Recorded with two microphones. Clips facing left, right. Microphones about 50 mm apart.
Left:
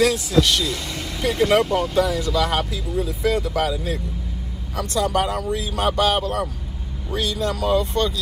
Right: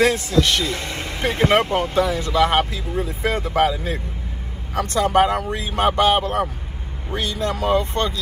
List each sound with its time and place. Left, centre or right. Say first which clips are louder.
0.0 s speech: even; right